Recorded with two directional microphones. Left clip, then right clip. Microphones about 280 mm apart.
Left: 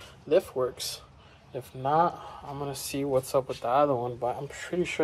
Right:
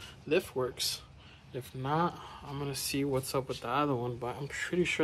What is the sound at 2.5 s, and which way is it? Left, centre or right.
Speech, centre.